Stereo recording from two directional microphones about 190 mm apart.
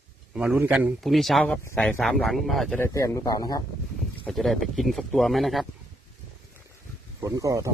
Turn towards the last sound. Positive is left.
turn(degrees=-15)  # may be behind; listen again after turning